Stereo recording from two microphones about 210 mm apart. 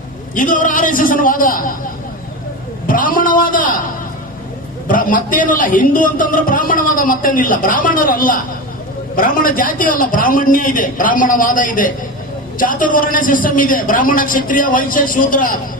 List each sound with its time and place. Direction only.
0.3 s a man's voice: 40° left (ahead or behind)
2.8 s a man's voice: 40° left (ahead or behind)
4.9 s a man's voice: 40° left (ahead or behind)